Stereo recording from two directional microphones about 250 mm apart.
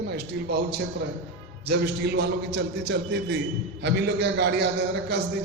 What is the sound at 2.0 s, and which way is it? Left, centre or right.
A man's voice, right.